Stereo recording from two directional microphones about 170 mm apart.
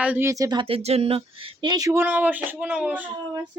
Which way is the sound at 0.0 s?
10° right (ahead or behind).